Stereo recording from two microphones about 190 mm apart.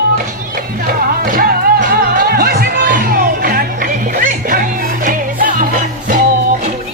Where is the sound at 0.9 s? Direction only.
50° right (ahead or behind).